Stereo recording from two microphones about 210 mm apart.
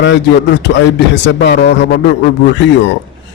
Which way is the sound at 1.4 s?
55° left (ahead or behind).